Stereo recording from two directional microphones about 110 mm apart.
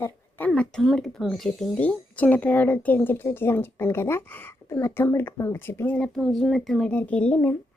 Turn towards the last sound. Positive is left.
turn(degrees=15)  # may be behind; listen again after turning